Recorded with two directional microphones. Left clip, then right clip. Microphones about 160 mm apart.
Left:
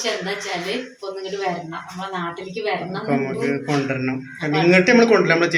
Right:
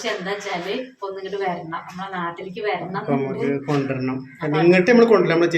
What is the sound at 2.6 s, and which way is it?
A man's voice, centre (ahead or behind).